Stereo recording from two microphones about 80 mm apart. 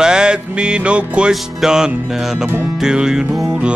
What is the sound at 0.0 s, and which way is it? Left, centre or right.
Music, centre.